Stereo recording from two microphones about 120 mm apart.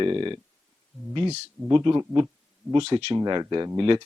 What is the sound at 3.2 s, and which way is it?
Speech, 35° right (ahead or behind).